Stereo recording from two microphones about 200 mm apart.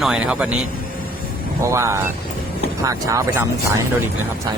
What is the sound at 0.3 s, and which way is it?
Speech, 5° right (ahead or behind).